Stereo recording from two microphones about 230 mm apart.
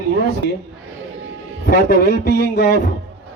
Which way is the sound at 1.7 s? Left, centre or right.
Left.